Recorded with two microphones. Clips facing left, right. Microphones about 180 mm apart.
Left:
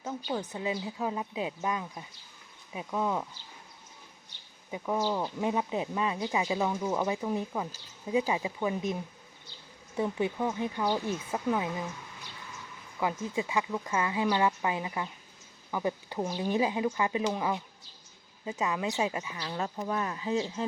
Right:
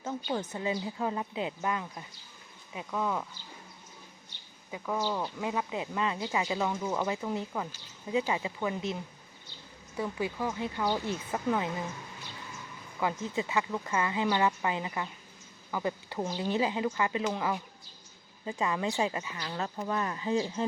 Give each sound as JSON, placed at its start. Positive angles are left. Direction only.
{"t": 0.3, "sound": "speech", "side_deg": 5}
{"t": 4.7, "sound": "speech", "side_deg": 15}
{"t": 10.0, "sound": "speech", "side_deg": 20}
{"t": 13.0, "sound": "speech", "side_deg": 10}